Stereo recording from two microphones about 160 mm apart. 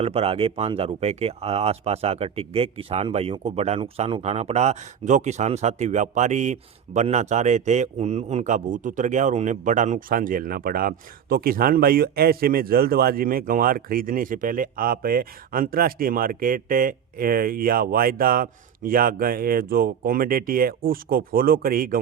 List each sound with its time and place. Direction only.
0.0 s speech: 40° right (ahead or behind); by 21.9 s 65° right (ahead or behind)